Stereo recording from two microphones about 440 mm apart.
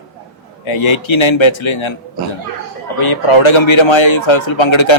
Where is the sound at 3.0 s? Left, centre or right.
Left.